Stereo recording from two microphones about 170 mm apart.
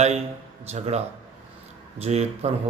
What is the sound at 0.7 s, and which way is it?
A man's voice, 40° right (ahead or behind).